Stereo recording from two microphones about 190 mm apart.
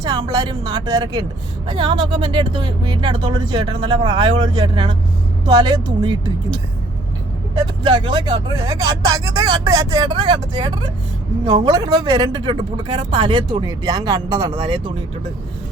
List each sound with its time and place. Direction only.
0.0 s speech: 20° right (ahead or behind)
7.6 s speech: 25° right (ahead or behind)